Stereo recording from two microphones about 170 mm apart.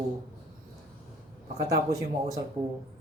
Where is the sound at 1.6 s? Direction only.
20° right (ahead or behind).